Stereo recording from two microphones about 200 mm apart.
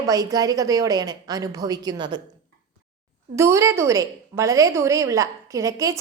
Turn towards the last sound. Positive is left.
turn(degrees=-15)  # may be behind; listen again after turning